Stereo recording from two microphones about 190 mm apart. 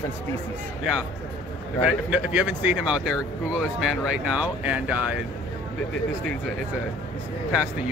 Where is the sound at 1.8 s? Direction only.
5° right (ahead or behind).